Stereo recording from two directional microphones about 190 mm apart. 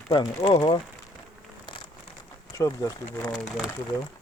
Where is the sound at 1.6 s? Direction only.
25° left (ahead or behind).